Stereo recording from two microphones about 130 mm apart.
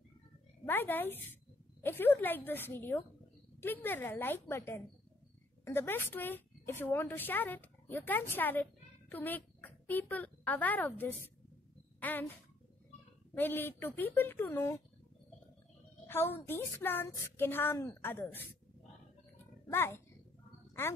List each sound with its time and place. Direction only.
0.7 s a woman's voice: 15° left (ahead or behind)
13.4 s a woman's voice: 15° left (ahead or behind)
16.1 s a woman's voice: 15° left (ahead or behind)
19.7 s a child's voice: 20° left (ahead or behind)